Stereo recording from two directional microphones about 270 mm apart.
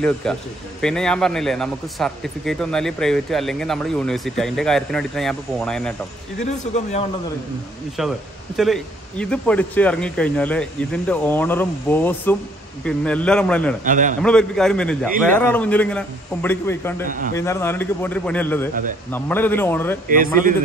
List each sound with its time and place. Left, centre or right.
0.0 s speech: centre
6.4 s speech: left
8.0 s speech: centre
13.8 s a man's voice: right
14.2 s speech: centre